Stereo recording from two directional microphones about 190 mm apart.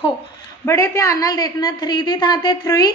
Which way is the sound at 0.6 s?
15° left (ahead or behind).